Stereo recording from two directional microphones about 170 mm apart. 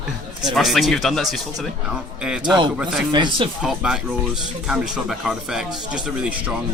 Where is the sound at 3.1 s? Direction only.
25° right (ahead or behind).